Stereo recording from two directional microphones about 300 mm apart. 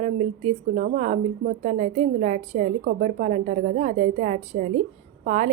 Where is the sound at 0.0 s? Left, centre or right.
Right.